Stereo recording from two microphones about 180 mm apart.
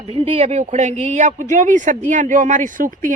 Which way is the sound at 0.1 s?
30° right (ahead or behind).